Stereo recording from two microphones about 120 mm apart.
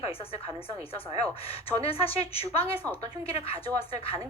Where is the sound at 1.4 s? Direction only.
55° left (ahead or behind).